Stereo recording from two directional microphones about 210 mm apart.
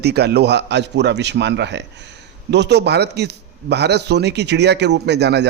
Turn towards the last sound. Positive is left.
turn(degrees=-55)  # may be behind; listen again after turning